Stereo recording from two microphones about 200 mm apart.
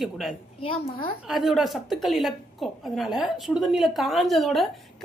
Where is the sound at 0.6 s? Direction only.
25° left (ahead or behind).